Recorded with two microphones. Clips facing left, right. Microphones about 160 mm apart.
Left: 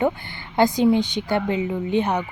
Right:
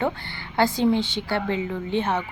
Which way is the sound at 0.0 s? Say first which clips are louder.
Left 4 dB; 20° left (ahead or behind).